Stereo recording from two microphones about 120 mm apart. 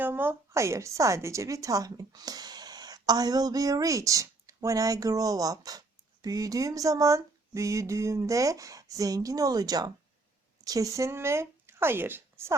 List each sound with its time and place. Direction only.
0.0 s a woman's voice: 15° right (ahead or behind)